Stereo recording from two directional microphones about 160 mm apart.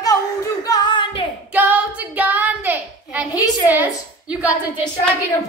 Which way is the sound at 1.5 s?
10° right (ahead or behind).